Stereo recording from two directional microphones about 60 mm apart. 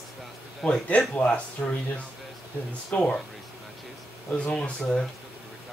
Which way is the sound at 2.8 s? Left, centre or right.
Centre.